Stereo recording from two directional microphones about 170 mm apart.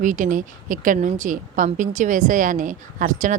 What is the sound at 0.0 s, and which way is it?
A woman's voice, 50° right (ahead or behind).